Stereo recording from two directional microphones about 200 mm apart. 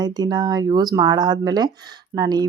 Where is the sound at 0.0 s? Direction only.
20° right (ahead or behind).